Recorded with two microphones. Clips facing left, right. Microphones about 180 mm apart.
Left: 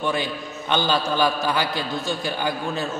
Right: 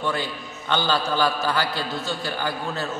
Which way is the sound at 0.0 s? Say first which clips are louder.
Left 2 dB; 15° left (ahead or behind).